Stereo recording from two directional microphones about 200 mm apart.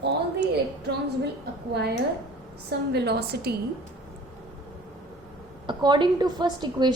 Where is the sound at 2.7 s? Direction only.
55° right (ahead or behind).